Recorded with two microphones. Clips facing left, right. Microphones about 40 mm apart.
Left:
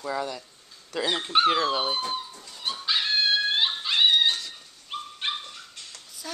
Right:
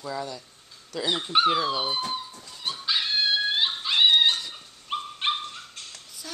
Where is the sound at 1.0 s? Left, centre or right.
Centre.